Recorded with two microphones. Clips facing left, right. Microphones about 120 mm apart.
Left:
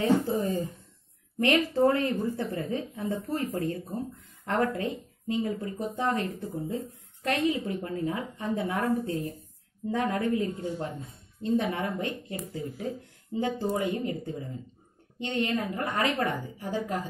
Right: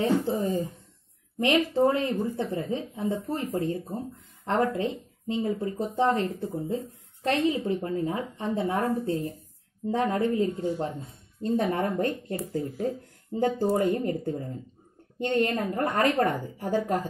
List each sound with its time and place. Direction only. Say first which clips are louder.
0.0 s a sound: even; 25° right (ahead or behind)
1.4 s a woman's voice: right 1 dB; 20° right (ahead or behind)
7.2 s a woman's voice: right 2 dB; 30° right (ahead or behind); by 17.1 s 45° right (ahead or behind)